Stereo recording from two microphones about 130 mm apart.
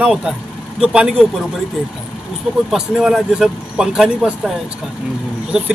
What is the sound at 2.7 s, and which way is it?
Speech, 5° right (ahead or behind).